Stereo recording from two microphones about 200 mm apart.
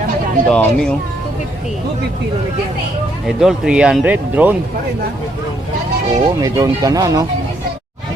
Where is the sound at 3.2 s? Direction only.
Centre (ahead or behind).